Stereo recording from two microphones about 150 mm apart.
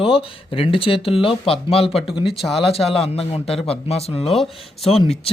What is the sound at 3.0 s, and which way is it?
Speech, 40° left (ahead or behind).